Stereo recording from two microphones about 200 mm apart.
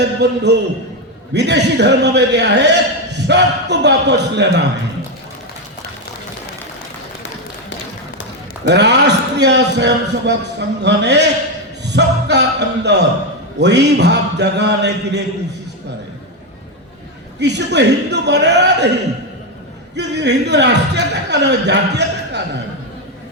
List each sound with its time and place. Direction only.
0.0 s a man's voice: 60° right (ahead or behind)
8.6 s a man's voice: 60° right (ahead or behind)
17.4 s a man's voice: 60° right (ahead or behind)
20.0 s a man's voice: 60° right (ahead or behind)